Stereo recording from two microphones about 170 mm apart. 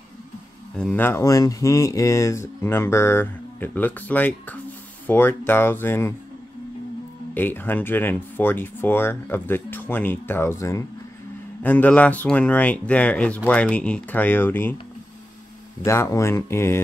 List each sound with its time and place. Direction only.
0.7 s speech: 10° left (ahead or behind)
7.3 s speech: 10° left (ahead or behind)
15.8 s speech: 15° left (ahead or behind)